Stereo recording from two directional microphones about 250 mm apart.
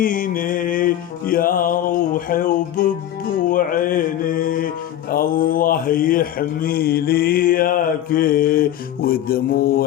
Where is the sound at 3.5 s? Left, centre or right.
Left.